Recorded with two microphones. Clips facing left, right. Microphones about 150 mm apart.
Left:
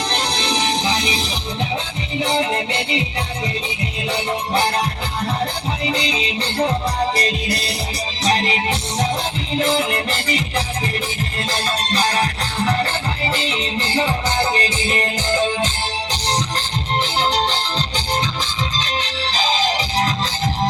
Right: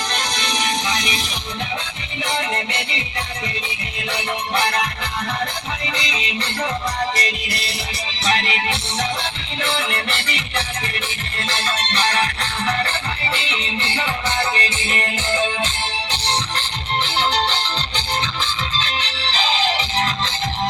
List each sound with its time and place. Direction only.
0.1 s music: 30° left (ahead or behind)
4.1 s music: 30° left (ahead or behind)
12.1 s music: 10° left (ahead or behind)
13.3 s music: 40° left (ahead or behind)